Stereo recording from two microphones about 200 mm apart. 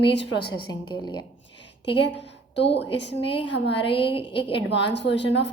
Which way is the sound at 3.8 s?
25° left (ahead or behind).